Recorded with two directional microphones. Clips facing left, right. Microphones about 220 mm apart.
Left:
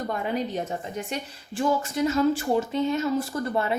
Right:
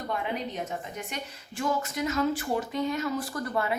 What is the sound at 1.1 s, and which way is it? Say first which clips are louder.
Speech: left 5 dB; 30° left (ahead or behind).